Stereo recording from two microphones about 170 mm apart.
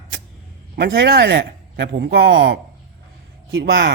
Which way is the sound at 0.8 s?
65° right (ahead or behind).